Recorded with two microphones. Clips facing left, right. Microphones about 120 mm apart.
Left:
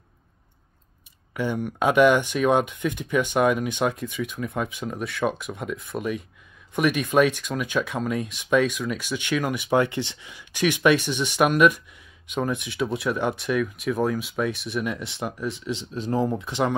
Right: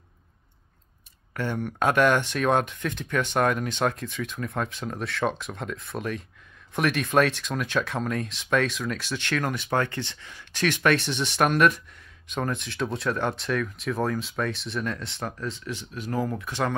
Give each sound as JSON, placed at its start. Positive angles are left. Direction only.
{"t": 1.3, "sound": "speech", "side_deg": 5}